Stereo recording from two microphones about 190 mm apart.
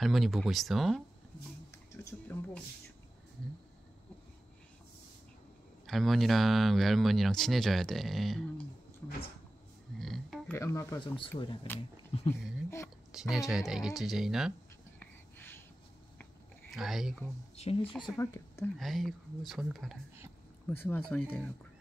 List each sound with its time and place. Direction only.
0.0 s speech: centre (ahead or behind)
1.9 s speech: 10° left (ahead or behind)
5.9 s speech: centre (ahead or behind)
9.9 s speech: centre (ahead or behind)
10.6 s speech: 15° left (ahead or behind); by 12.4 s 30° left (ahead or behind)
12.6 s speech: 15° left (ahead or behind)
13.1 s speech: centre (ahead or behind)
15.0 s a sound: 10° left (ahead or behind)
16.7 s speech: centre (ahead or behind)
17.6 s speech: 30° left (ahead or behind); by 18.7 s 15° left (ahead or behind)
18.8 s speech: centre (ahead or behind)